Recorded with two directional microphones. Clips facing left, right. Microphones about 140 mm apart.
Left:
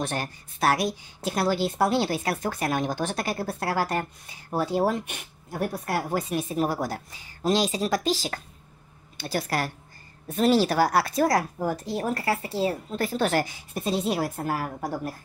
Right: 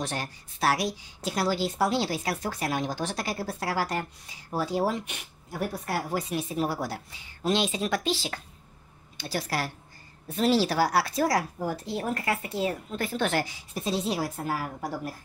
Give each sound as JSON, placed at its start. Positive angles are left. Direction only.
{"t": 0.0, "sound": "a woman's voice", "side_deg": 50}